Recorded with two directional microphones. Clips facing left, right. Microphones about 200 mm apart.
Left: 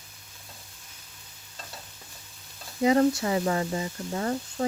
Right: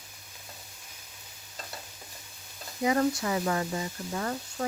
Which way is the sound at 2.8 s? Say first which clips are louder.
Left 4 dB; 25° left (ahead or behind).